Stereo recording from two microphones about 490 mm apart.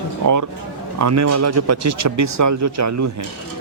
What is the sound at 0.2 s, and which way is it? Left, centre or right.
Speech, right.